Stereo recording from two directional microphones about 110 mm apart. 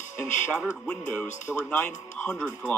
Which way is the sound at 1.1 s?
15° left (ahead or behind).